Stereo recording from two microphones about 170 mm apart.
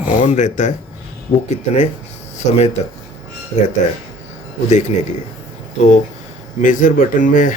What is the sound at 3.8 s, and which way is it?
Speech, 45° left (ahead or behind).